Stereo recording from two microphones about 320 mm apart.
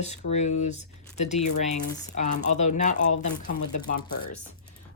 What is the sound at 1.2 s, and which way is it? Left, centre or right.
A woman's voice, left.